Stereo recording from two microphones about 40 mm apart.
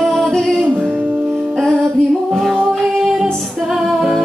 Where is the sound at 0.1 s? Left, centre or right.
Centre.